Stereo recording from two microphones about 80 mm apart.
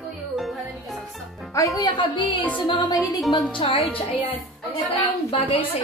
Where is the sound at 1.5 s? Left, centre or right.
Left.